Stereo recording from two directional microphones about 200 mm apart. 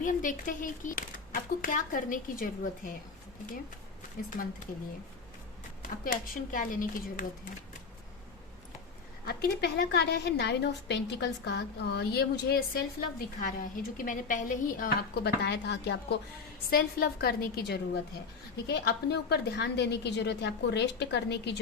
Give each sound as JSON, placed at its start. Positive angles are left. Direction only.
{"t": 0.0, "sound": "speech", "side_deg": 40}
{"t": 6.3, "sound": "a woman's voice", "side_deg": 45}
{"t": 9.2, "sound": "a woman's voice", "side_deg": 55}